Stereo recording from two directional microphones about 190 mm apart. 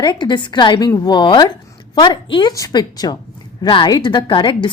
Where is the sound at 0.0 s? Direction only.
25° left (ahead or behind).